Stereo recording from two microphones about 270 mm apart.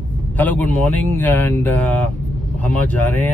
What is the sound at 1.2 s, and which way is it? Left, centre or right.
Speech, centre.